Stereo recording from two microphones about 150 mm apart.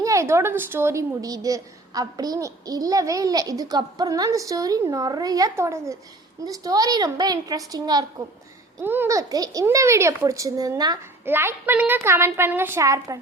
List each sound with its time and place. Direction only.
0.0 s a woman's voice: 20° right (ahead or behind)
8.8 s a woman's voice: 15° right (ahead or behind)